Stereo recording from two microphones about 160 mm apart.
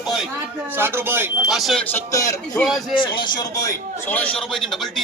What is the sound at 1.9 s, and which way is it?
Speech, 20° left (ahead or behind).